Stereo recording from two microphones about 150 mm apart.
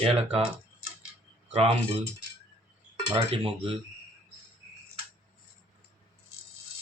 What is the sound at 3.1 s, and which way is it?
Cutlery, 35° right (ahead or behind).